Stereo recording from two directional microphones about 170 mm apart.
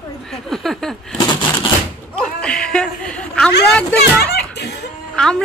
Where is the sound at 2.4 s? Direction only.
5° left (ahead or behind).